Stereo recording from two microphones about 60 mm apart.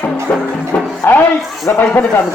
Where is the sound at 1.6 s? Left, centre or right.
Left.